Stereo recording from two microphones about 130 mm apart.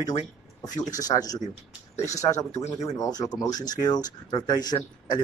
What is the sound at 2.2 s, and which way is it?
Speech, 25° left (ahead or behind).